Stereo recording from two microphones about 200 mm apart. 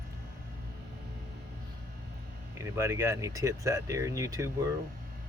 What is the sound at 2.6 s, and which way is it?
Speech, 10° right (ahead or behind).